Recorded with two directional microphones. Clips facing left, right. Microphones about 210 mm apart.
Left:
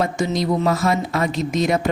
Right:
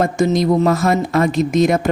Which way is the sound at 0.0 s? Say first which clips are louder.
Right 5 dB; 45° right (ahead or behind).